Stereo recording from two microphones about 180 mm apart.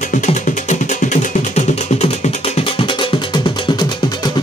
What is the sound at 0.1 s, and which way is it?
Music, 45° left (ahead or behind).